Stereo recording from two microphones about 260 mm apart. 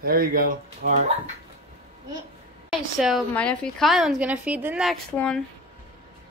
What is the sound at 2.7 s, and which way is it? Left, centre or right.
A woman's voice, centre.